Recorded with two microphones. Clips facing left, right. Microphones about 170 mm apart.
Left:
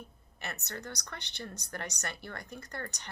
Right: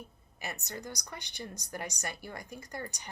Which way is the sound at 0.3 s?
15° right (ahead or behind).